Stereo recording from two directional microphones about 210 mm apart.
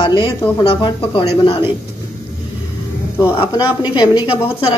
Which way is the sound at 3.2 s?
10° left (ahead or behind).